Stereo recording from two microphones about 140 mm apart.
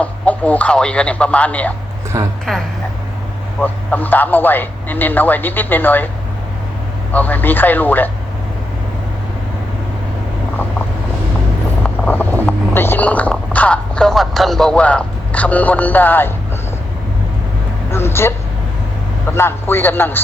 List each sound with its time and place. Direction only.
0.0 s a man's voice: 10° left (ahead or behind)
2.1 s a woman's voice: 25° right (ahead or behind)
3.6 s a man's voice: 10° left (ahead or behind)
7.1 s a man's voice: 10° left (ahead or behind)
11.8 s a sound: 10° left (ahead or behind)
17.9 s a man's voice: 20° left (ahead or behind)